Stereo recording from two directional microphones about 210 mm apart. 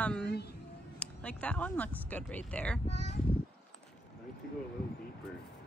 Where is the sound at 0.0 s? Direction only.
5° left (ahead or behind).